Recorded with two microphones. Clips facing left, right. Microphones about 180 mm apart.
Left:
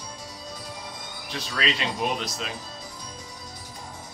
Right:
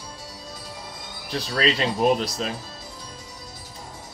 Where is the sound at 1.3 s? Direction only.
40° right (ahead or behind).